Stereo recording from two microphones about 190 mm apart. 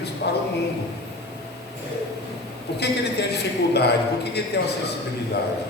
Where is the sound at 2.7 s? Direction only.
60° left (ahead or behind).